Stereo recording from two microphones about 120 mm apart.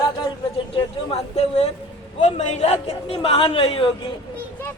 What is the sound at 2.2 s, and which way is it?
A man's voice, 70° left (ahead or behind).